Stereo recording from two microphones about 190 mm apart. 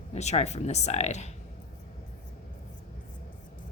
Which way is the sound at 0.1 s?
35° left (ahead or behind).